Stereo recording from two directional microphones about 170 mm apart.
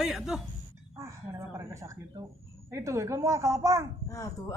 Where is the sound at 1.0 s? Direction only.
20° right (ahead or behind).